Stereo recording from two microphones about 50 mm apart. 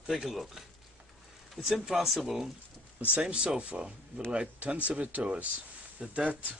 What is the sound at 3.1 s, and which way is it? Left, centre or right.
Speech, right.